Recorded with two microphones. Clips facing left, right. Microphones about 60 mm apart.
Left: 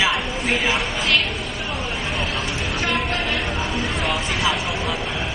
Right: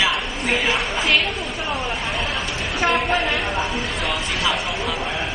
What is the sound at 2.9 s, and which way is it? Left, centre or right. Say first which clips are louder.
A woman's voice: right 4 dB; centre.